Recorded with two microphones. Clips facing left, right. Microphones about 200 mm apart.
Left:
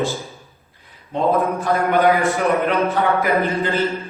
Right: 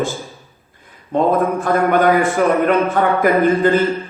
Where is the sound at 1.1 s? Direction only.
50° right (ahead or behind).